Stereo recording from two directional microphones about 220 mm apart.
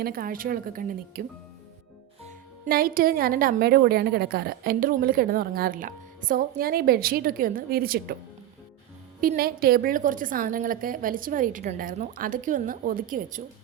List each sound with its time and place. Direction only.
0.0 s a woman's voice: 40° right (ahead or behind)
2.6 s a woman's voice: 40° right (ahead or behind)
9.2 s a woman's voice: 45° right (ahead or behind)